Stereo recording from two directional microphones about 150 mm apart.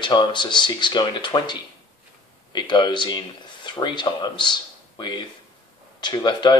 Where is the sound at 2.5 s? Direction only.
30° left (ahead or behind).